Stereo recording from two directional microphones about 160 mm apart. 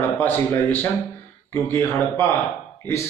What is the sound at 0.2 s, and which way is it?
Speech, 10° left (ahead or behind).